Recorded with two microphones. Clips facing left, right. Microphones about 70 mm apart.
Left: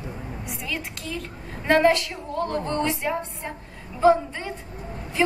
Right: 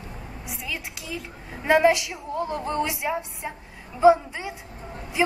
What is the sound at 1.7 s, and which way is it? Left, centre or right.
Music, centre.